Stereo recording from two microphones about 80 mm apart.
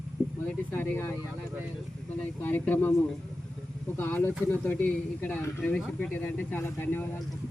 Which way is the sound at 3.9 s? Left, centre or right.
Left.